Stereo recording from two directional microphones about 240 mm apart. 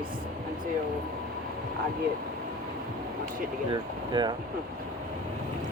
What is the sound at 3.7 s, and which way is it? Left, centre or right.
Speech, centre.